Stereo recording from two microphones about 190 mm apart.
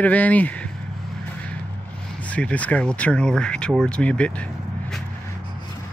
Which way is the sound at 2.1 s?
5° left (ahead or behind).